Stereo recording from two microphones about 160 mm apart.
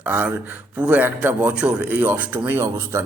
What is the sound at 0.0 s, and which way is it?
Speech, 10° right (ahead or behind).